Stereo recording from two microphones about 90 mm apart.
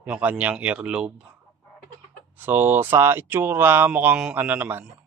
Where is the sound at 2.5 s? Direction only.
25° right (ahead or behind).